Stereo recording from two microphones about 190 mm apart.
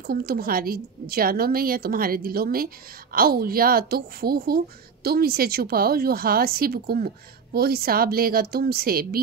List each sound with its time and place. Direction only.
0.0 s a woman's voice: 55° right (ahead or behind)